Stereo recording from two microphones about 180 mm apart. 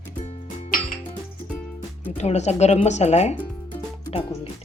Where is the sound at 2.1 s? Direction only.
40° left (ahead or behind).